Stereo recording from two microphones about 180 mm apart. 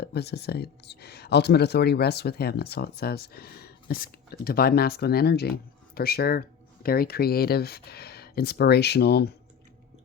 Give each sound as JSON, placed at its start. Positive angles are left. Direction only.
{"t": 0.0, "sound": "speech", "side_deg": 65}